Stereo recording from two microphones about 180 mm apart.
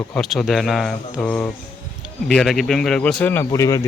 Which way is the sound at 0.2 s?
Centre (ahead or behind).